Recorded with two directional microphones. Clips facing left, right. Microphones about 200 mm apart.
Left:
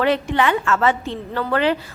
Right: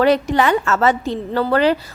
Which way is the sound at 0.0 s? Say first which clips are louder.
Right 4 dB; 40° right (ahead or behind).